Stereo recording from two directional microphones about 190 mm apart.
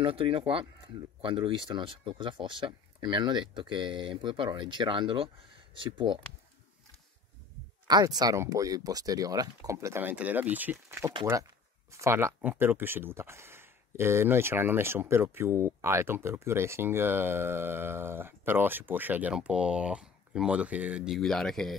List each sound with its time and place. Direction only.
0.0 s speech: 30° right (ahead or behind)
7.8 s speech: 20° right (ahead or behind); by 21.7 s centre (ahead or behind)